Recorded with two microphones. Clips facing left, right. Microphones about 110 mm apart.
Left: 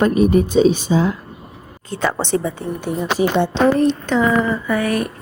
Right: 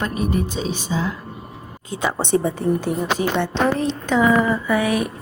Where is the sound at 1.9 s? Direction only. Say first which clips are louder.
Left 3 dB; 15° right (ahead or behind).